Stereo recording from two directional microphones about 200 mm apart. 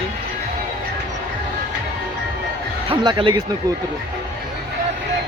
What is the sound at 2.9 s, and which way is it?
Speech, 25° right (ahead or behind).